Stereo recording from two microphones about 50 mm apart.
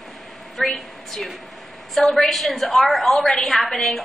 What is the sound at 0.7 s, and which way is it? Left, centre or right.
A woman's voice, centre.